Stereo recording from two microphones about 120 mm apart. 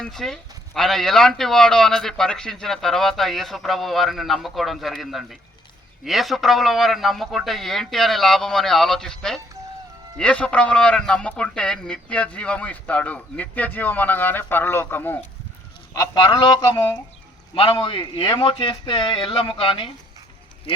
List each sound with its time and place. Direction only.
0.0 s a man's voice: 5° left (ahead or behind)
15.9 s speech: 25° left (ahead or behind)
17.5 s a man's voice: 50° left (ahead or behind)
20.7 s a sound: 55° left (ahead or behind)